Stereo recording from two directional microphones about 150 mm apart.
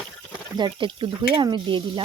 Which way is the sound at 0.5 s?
30° right (ahead or behind).